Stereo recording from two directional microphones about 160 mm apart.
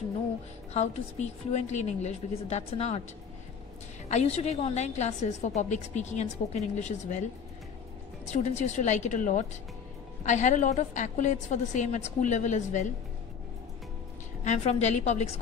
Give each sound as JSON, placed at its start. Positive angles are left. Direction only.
{"t": 0.7, "sound": "a woman's voice", "side_deg": 45}
{"t": 4.1, "sound": "a woman's voice", "side_deg": 40}
{"t": 8.3, "sound": "a woman's voice", "side_deg": 45}
{"t": 14.4, "sound": "a woman's voice", "side_deg": 45}